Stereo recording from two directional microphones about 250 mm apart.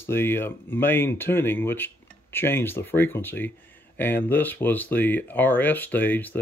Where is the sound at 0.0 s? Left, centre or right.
Centre.